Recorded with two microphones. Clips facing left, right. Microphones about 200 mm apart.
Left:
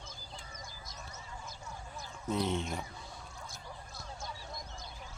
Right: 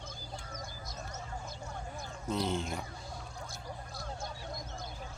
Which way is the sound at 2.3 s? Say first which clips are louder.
Even; centre (ahead or behind).